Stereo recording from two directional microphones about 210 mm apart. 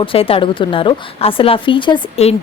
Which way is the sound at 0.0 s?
25° left (ahead or behind).